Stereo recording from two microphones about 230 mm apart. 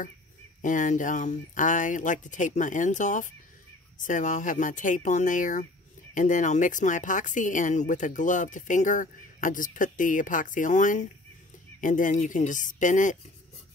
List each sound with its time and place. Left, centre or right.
0.6 s speech: left